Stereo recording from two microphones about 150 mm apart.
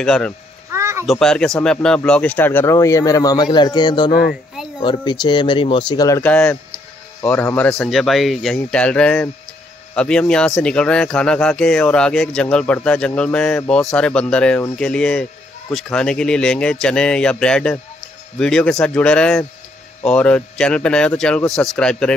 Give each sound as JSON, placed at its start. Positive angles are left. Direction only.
{"t": 0.0, "sound": "speech", "side_deg": 5}
{"t": 0.7, "sound": "a sound", "side_deg": -20}
{"t": 1.0, "sound": "a man's voice", "side_deg": 5}
{"t": 6.2, "sound": "speech", "side_deg": 10}